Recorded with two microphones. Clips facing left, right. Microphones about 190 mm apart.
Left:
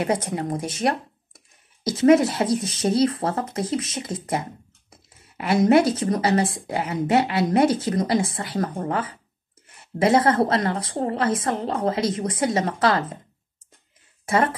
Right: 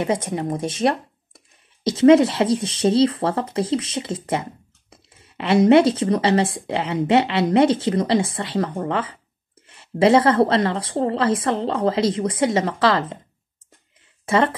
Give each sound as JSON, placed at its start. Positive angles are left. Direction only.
{"t": 0.0, "sound": "a woman's voice", "side_deg": -25}
{"t": 9.7, "sound": "a woman's voice", "side_deg": -25}
{"t": 14.2, "sound": "speech", "side_deg": -25}